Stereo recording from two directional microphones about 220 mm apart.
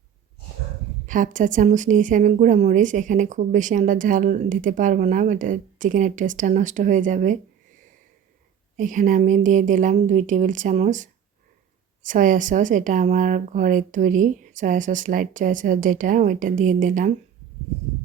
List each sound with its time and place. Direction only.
1.0 s speech: 35° right (ahead or behind)
8.7 s speech: 35° right (ahead or behind)